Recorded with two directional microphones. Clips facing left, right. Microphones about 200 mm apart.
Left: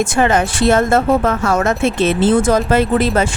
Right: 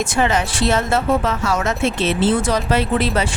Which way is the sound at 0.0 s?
50° left (ahead or behind).